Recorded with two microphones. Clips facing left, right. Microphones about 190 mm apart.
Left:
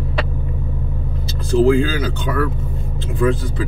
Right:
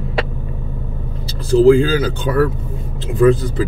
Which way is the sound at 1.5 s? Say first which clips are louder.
Right 4 dB; 30° right (ahead or behind).